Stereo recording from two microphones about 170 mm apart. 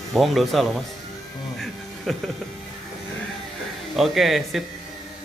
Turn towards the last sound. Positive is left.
turn(degrees=0)  # may be behind; listen again after turning